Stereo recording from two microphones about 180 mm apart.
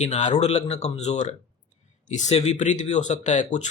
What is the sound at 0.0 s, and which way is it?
Speech, 40° left (ahead or behind).